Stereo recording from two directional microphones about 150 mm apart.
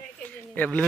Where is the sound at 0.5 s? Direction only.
10° left (ahead or behind).